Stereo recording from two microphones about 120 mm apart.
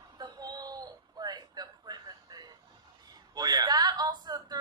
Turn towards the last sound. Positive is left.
turn(degrees=-35)  # may be behind; listen again after turning